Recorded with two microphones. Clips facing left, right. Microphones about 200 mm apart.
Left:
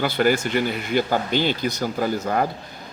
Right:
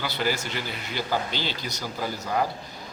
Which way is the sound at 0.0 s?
55° left (ahead or behind).